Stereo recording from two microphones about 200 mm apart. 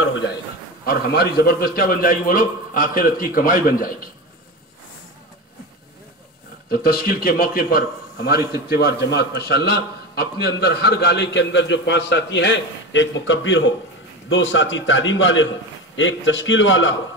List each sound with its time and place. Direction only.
0.8 s a man's voice: 55° left (ahead or behind)
6.7 s a man's voice: 50° left (ahead or behind); by 16.9 s 70° left (ahead or behind)